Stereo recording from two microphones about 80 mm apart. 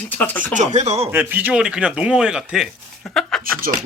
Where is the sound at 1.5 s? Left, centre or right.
Centre.